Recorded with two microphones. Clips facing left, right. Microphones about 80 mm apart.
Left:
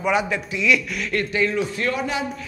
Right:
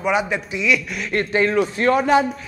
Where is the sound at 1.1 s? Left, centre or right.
Right.